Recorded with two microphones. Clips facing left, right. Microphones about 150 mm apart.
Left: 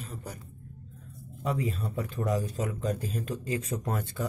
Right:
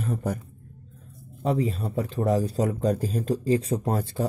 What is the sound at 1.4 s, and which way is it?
Speech, 35° right (ahead or behind).